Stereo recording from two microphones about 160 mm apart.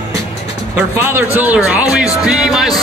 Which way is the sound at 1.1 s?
15° right (ahead or behind).